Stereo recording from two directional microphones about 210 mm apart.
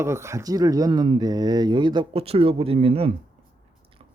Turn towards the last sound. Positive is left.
turn(degrees=-30)  # may be behind; listen again after turning